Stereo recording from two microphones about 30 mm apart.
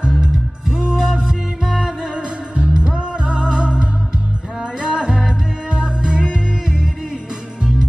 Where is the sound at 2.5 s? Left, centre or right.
Right.